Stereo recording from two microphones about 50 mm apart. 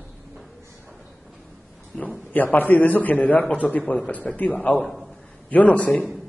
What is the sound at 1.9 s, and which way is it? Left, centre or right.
Speech, centre.